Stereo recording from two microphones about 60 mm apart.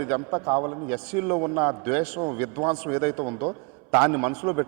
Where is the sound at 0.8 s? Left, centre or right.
Right.